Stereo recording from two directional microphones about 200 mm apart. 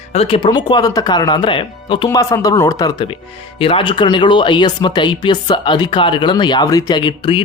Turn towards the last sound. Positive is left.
turn(degrees=25)  # may be behind; listen again after turning